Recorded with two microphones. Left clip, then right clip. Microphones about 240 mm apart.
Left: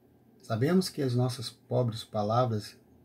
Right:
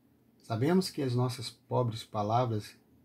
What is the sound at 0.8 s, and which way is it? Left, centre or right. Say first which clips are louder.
Speech: left 2 dB; centre.